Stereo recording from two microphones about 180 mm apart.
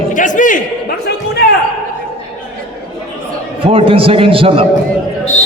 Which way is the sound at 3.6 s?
30° right (ahead or behind).